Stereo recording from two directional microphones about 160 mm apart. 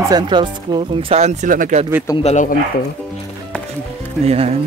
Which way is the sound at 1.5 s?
55° right (ahead or behind).